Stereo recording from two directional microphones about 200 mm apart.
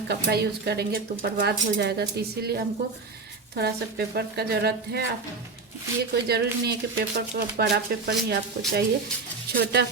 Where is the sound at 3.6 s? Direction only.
50° right (ahead or behind).